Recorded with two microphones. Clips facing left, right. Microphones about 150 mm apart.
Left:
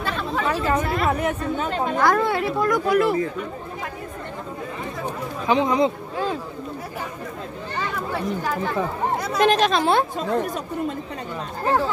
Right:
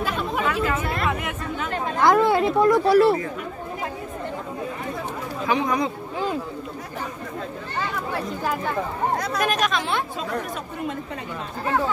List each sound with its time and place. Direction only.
0.5 s chatter: 35° left (ahead or behind)
0.8 s a sound: centre (ahead or behind)
1.1 s speech: 35° left (ahead or behind)
2.0 s speech: 20° right (ahead or behind)
5.5 s speech: 20° left (ahead or behind)
9.4 s speech: 30° left (ahead or behind)